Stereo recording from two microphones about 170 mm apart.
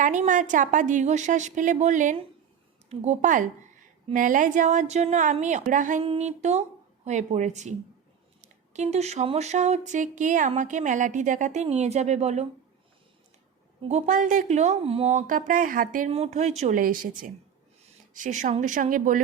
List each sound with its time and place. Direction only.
0.0 s speech: 50° right (ahead or behind)
6.0 s speech: 35° right (ahead or behind)
13.8 s speech: 45° right (ahead or behind)
16.1 s speech: 40° right (ahead or behind)